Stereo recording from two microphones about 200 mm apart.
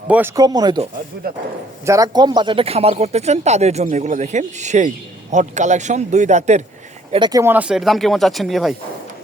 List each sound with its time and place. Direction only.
0.1 s speech: 10° right (ahead or behind)
1.8 s speech: 15° right (ahead or behind); by 6.6 s 35° right (ahead or behind)
7.1 s speech: 20° right (ahead or behind); by 8.7 s centre (ahead or behind)